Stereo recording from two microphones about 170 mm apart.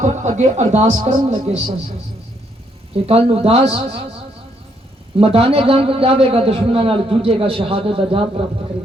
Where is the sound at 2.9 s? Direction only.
35° right (ahead or behind).